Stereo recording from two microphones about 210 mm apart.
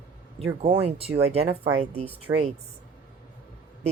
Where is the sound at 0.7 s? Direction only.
30° right (ahead or behind).